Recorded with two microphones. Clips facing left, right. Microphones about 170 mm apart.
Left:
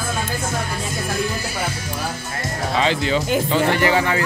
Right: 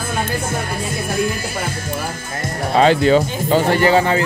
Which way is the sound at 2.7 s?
50° right (ahead or behind).